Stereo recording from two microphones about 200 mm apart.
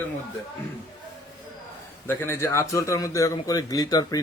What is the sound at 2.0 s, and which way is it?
Speech, 10° left (ahead or behind).